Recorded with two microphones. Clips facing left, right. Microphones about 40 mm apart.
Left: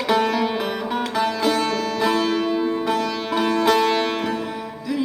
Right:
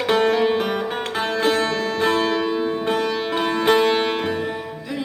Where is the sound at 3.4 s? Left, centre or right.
Right.